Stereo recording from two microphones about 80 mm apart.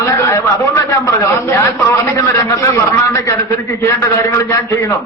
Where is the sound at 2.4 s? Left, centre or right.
Left.